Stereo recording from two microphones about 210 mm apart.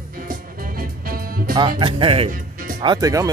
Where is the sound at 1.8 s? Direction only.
25° right (ahead or behind).